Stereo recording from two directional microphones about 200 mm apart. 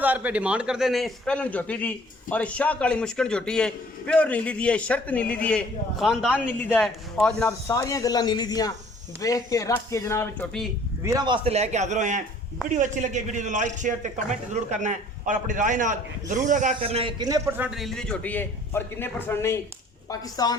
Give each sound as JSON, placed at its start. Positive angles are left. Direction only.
{"t": 0.0, "sound": "a man's voice", "side_deg": -10}
{"t": 11.0, "sound": "a man's voice", "side_deg": -20}
{"t": 17.7, "sound": "a woman's voice", "side_deg": 0}